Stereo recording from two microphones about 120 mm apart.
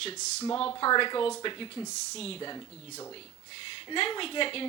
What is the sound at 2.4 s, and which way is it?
Speech, 35° left (ahead or behind).